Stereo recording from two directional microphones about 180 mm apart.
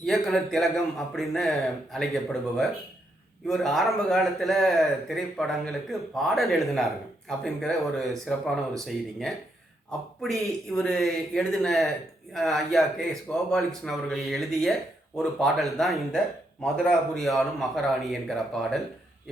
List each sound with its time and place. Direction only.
0.0 s a man's voice: centre (ahead or behind)
10.7 s a man's voice: 5° left (ahead or behind)